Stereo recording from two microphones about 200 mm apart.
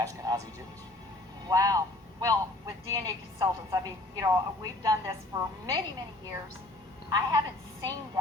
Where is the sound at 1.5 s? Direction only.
15° right (ahead or behind).